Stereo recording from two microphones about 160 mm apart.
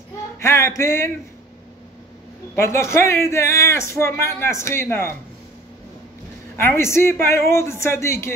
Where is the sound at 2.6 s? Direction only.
15° left (ahead or behind).